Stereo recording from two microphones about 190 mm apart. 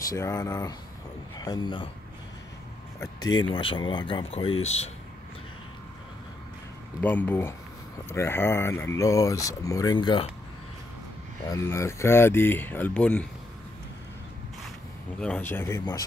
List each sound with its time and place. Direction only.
0.1 s speech: 20° left (ahead or behind)
3.5 s speech: 25° left (ahead or behind)
7.0 s speech: 10° left (ahead or behind); by 10.3 s 25° left (ahead or behind)
11.5 s speech: 15° left (ahead or behind)
15.1 s speech: 5° left (ahead or behind)